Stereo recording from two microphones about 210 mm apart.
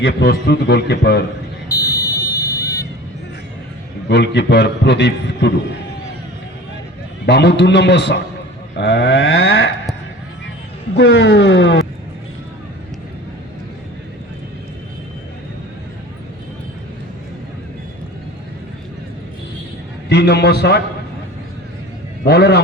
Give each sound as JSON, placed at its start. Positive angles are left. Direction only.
{"t": 0.0, "sound": "a man's voice", "side_deg": 55}
{"t": 1.7, "sound": "a sound", "side_deg": 15}
{"t": 4.1, "sound": "a man's voice", "side_deg": 55}
{"t": 7.3, "sound": "a man's voice", "side_deg": 55}
{"t": 10.9, "sound": "a man's voice", "side_deg": 55}
{"t": 20.1, "sound": "a man's voice", "side_deg": 50}
{"t": 22.2, "sound": "a man's voice", "side_deg": 50}